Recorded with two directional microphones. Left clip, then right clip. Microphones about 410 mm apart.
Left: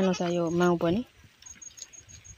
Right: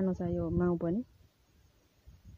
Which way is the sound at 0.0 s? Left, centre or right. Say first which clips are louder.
Left 8 dB; right.